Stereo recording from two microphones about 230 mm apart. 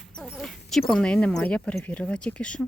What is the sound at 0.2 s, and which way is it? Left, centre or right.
Dog, centre.